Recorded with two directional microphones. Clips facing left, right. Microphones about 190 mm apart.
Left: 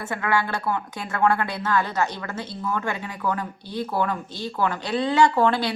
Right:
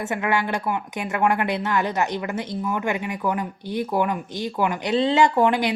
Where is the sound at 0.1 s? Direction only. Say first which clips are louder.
Even; 20° right (ahead or behind).